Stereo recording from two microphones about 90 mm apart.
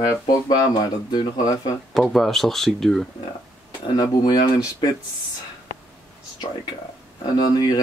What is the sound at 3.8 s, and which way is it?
Speech, 55° left (ahead or behind).